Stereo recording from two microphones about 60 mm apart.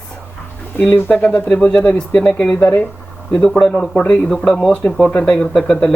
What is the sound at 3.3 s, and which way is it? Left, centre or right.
Speech, centre.